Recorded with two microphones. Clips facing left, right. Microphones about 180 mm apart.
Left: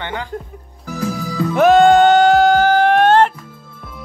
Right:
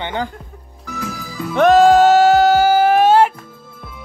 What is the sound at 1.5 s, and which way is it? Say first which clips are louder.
Music: even; 5° left (ahead or behind).